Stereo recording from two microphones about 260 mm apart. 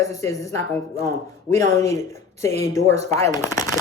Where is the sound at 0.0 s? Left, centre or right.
Centre.